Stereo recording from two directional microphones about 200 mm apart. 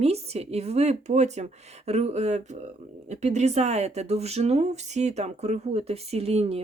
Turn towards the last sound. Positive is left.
turn(degrees=-30)  # may be behind; listen again after turning